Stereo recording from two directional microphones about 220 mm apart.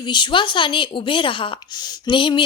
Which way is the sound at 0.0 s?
20° left (ahead or behind).